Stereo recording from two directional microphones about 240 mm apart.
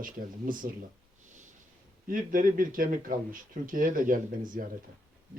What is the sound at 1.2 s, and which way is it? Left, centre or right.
Snort, right.